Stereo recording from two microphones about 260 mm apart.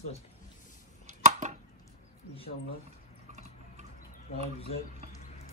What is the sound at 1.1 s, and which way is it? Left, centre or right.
Arrow, right.